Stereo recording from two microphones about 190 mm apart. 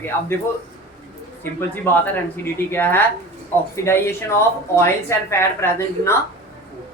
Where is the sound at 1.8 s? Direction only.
10° left (ahead or behind).